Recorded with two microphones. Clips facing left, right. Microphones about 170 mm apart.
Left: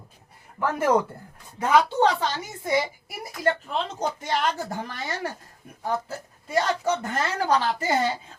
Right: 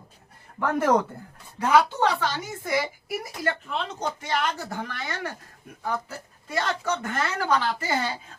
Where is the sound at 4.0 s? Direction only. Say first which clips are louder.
Left 1 dB; 45° left (ahead or behind); by 6.1 s 25° left (ahead or behind).